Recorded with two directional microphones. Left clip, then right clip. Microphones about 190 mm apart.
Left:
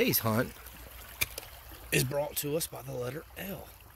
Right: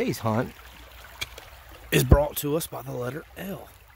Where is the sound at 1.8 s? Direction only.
45° right (ahead or behind).